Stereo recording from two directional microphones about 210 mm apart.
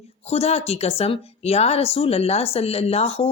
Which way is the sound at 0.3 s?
30° left (ahead or behind).